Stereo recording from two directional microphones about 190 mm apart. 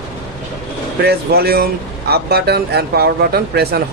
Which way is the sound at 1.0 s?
55° right (ahead or behind).